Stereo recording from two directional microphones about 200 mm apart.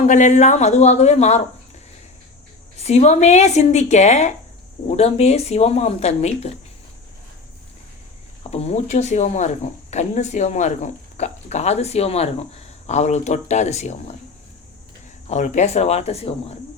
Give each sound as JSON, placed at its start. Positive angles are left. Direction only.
{"t": 0.0, "sound": "speech", "side_deg": 40}
{"t": 2.7, "sound": "speech", "side_deg": 30}
{"t": 8.4, "sound": "speech", "side_deg": 30}
{"t": 15.3, "sound": "speech", "side_deg": 35}